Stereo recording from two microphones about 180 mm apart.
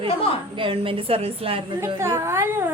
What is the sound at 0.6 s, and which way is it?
Speech, 30° right (ahead or behind).